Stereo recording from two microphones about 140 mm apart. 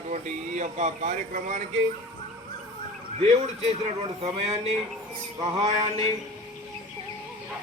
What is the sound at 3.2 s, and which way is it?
A man's voice, 55° right (ahead or behind).